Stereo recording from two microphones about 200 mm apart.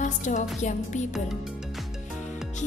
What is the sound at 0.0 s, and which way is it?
Music, 40° left (ahead or behind).